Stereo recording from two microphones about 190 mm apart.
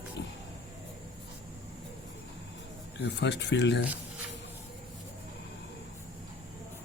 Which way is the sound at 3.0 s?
65° left (ahead or behind).